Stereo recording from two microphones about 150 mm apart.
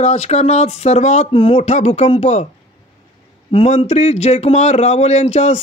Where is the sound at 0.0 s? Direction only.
45° left (ahead or behind).